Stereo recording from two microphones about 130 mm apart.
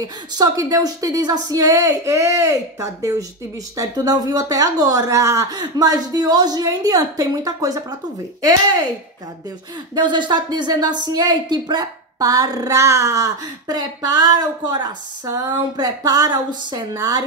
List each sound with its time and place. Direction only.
0.0 s speech: 30° right (ahead or behind)
9.9 s a woman's voice: 35° right (ahead or behind)